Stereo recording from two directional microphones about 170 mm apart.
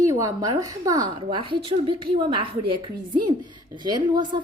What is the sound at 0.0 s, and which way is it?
A woman's voice, 20° right (ahead or behind).